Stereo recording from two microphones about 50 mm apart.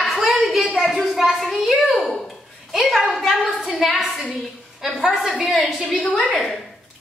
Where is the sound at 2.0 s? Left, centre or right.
Centre.